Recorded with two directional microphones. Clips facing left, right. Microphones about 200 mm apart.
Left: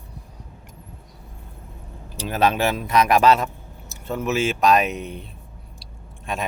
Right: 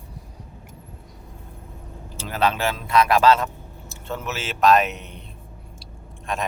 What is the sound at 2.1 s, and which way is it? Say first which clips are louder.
A man's voice: left 3 dB; 15° left (ahead or behind).